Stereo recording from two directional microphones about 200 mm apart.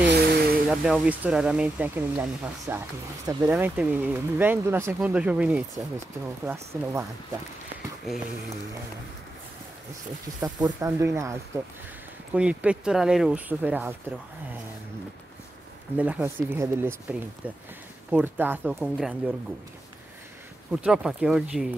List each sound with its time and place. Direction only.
0.1 s vehicle: 55° right (ahead or behind)
0.7 s speech: 5° right (ahead or behind)
10.4 s speech: 15° right (ahead or behind)
16.0 s speech: 10° right (ahead or behind)
20.7 s speech: 5° right (ahead or behind)